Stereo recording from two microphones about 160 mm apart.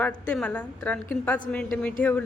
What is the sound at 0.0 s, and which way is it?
A woman's voice, 10° left (ahead or behind).